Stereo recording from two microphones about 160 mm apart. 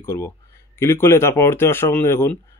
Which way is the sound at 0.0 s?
15° left (ahead or behind).